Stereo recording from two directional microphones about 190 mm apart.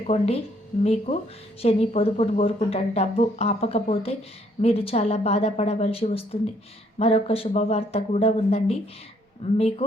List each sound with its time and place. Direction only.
0.1 s speech: 35° left (ahead or behind)